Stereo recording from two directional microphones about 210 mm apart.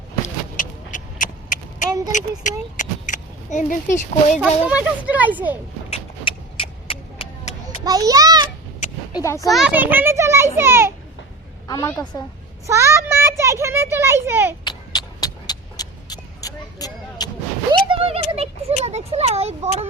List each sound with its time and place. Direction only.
0.5 s a sound: 40° left (ahead or behind)
1.9 s a sound: 15° right (ahead or behind)
2.1 s speech: 35° left (ahead or behind)
4.4 s a child's voice: 5° right (ahead or behind)
5.9 s vehicle: 25° left (ahead or behind)
7.9 s a child's voice: 15° right (ahead or behind)
9.1 s a woman's voice: 15° left (ahead or behind)
9.5 s a child's voice: 5° right (ahead or behind)
11.7 s a woman's voice: 15° left (ahead or behind)
12.6 s a child's voice: 15° right (ahead or behind)
14.6 s vehicle: 20° left (ahead or behind)
17.8 s a sound: 25° right (ahead or behind)
18.9 s speech: 30° right (ahead or behind)